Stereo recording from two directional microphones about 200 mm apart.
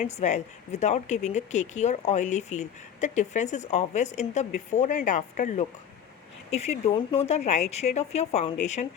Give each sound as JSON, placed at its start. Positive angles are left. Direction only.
{"t": 0.0, "sound": "speech", "side_deg": 35}